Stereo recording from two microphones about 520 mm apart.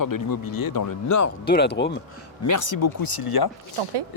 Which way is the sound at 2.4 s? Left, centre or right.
Left.